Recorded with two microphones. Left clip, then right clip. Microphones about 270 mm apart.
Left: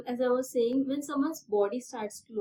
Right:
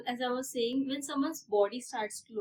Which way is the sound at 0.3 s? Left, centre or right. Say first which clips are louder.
Left 7 dB; right.